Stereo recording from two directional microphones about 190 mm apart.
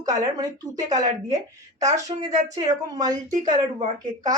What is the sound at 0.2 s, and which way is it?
Speech, 20° right (ahead or behind).